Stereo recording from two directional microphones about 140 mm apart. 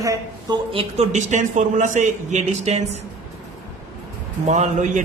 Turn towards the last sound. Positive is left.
turn(degrees=-55)  # may be behind; listen again after turning